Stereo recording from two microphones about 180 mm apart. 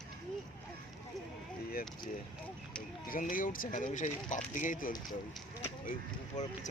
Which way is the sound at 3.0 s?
50° left (ahead or behind).